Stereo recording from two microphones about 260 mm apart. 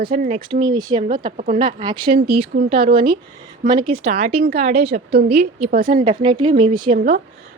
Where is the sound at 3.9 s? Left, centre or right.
Right.